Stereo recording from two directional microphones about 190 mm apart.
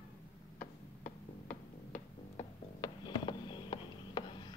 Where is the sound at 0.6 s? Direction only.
45° left (ahead or behind).